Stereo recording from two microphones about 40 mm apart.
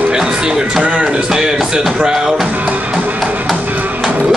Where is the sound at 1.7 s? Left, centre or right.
Centre.